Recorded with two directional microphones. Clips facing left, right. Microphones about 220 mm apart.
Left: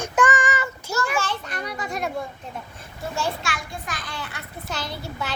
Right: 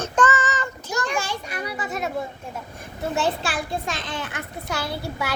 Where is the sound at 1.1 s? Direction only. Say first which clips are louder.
Even; 10° right (ahead or behind).